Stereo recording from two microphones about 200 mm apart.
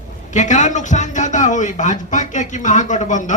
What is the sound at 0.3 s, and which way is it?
A man's voice, 40° left (ahead or behind).